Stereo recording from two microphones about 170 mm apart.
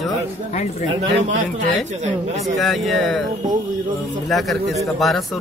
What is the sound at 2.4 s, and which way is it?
Speech, centre (ahead or behind).